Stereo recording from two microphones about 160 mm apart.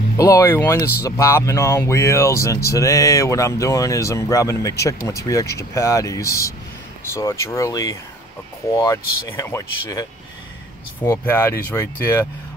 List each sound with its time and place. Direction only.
0.2 s speech: 20° left (ahead or behind)
11.1 s speech: 15° left (ahead or behind)